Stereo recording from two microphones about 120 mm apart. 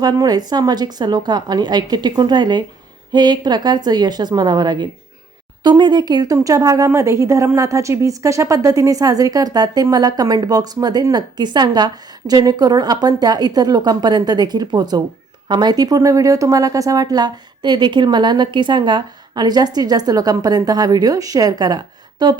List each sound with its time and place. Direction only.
0.0 s a woman's voice: 35° right (ahead or behind)